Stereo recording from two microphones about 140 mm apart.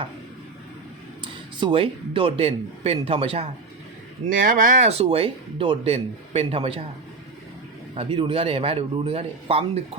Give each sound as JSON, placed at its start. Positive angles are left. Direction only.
{"t": 1.2, "sound": "speech", "side_deg": -35}
{"t": 4.3, "sound": "speech", "side_deg": -70}
{"t": 7.9, "sound": "speech", "side_deg": -40}